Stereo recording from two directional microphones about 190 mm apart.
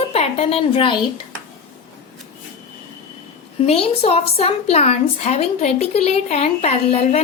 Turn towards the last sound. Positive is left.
turn(degrees=35)  # may be behind; listen again after turning